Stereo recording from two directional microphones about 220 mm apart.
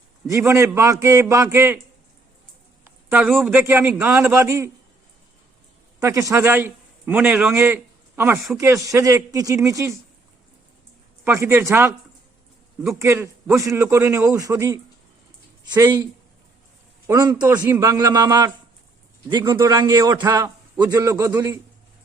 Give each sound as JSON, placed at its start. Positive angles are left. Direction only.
{"t": 0.3, "sound": "a man's voice", "side_deg": -15}
{"t": 3.1, "sound": "a man's voice", "side_deg": -10}
{"t": 6.0, "sound": "a man's voice", "side_deg": -15}
{"t": 11.3, "sound": "a man's voice", "side_deg": -10}
{"t": 17.1, "sound": "a man's voice", "side_deg": -20}